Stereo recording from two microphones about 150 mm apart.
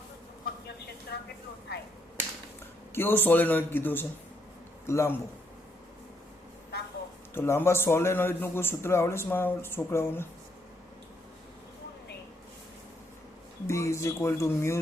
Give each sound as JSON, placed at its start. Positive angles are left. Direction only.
{"t": 1.1, "sound": "a sound", "side_deg": 90}
{"t": 2.9, "sound": "a man's voice", "side_deg": 15}
{"t": 7.3, "sound": "a man's voice", "side_deg": 15}
{"t": 13.7, "sound": "speech", "side_deg": 20}